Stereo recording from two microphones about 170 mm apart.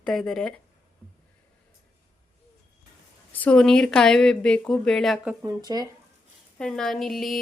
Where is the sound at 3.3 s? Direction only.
5° left (ahead or behind).